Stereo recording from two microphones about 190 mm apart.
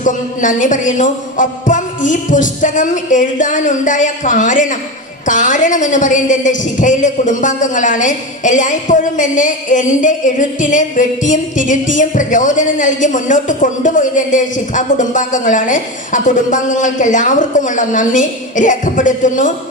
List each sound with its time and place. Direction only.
0.0 s a woman's voice: 40° left (ahead or behind)